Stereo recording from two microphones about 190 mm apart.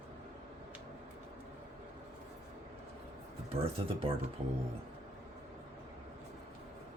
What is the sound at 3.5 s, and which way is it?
Speech, 30° right (ahead or behind).